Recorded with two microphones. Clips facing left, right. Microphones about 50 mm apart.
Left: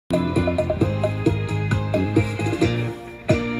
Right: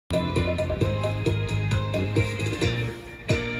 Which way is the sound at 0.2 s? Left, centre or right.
Centre.